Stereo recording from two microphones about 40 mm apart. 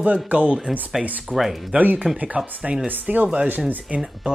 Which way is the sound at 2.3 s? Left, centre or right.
Right.